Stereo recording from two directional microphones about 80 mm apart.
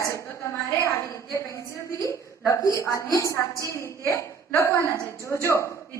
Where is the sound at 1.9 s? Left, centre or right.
Left.